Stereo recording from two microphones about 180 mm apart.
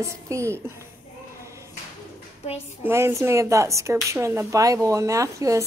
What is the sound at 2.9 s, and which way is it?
Speech, 15° right (ahead or behind).